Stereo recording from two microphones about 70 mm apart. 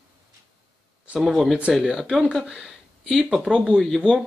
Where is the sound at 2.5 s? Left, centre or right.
Centre.